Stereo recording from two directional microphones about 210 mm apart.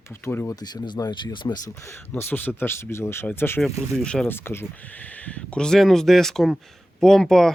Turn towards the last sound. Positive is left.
turn(degrees=0)  # may be behind; listen again after turning